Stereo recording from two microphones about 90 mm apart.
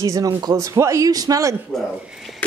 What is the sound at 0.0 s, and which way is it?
A man's voice, 40° right (ahead or behind).